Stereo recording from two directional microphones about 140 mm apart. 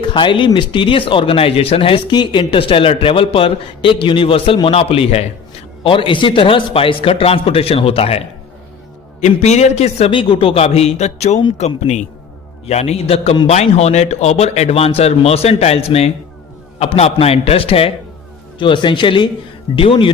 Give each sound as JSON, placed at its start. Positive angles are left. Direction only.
{"t": 0.0, "sound": "a man's voice", "side_deg": 35}
{"t": 10.1, "sound": "a man's voice", "side_deg": 40}